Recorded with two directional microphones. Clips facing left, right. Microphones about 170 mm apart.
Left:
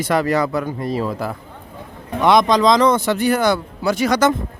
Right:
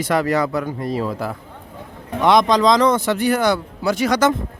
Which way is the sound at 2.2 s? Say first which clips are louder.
Left 1 dB; 10° left (ahead or behind).